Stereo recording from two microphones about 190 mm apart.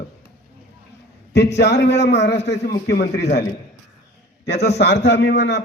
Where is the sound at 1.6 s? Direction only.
65° left (ahead or behind).